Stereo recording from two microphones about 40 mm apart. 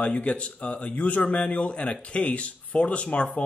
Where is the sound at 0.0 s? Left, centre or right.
Left.